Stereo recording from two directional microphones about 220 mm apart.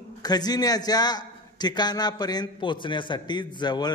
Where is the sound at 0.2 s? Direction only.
20° left (ahead or behind).